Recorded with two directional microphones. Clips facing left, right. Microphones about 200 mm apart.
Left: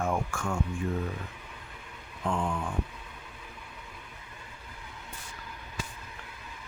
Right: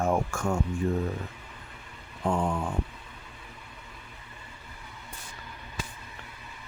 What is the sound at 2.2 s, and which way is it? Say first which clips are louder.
Speech: right 3 dB; 40° right (ahead or behind).